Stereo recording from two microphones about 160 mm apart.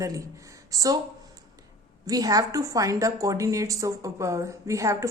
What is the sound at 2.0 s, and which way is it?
A woman's voice, 20° right (ahead or behind).